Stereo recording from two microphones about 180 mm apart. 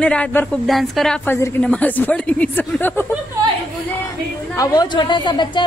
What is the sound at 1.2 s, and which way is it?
Speech, 10° left (ahead or behind).